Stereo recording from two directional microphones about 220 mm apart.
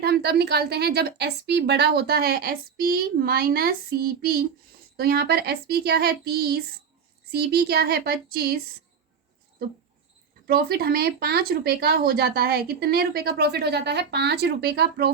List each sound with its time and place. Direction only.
0.0 s speech: 45° right (ahead or behind)
4.9 s speech: 45° right (ahead or behind)
10.4 s speech: 45° right (ahead or behind)